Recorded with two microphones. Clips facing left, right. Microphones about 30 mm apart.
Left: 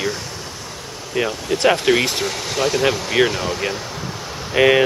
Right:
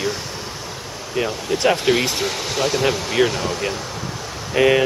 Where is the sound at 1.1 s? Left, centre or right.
Centre.